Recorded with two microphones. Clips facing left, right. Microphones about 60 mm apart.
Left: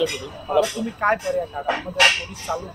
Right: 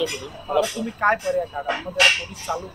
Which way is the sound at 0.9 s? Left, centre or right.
Centre.